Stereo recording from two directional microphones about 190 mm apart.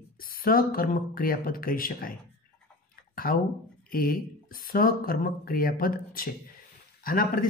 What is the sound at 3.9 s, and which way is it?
Speech, 50° left (ahead or behind).